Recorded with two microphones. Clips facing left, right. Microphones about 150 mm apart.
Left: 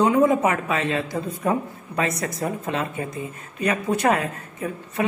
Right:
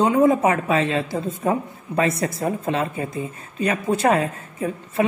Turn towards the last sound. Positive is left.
turn(degrees=-30)  # may be behind; listen again after turning